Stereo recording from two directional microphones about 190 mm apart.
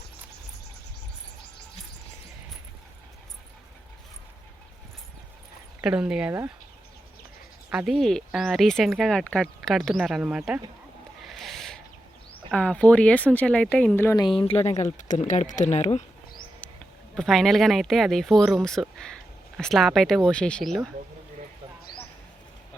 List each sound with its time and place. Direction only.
5.8 s speech: 5° right (ahead or behind)
7.7 s speech: centre (ahead or behind)
11.2 s a sound: centre (ahead or behind)
12.5 s speech: 5° left (ahead or behind)
14.3 s speech: 30° left (ahead or behind)
17.2 s speech: centre (ahead or behind)